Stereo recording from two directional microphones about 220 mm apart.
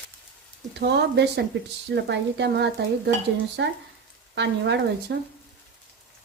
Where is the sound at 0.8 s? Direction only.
50° right (ahead or behind).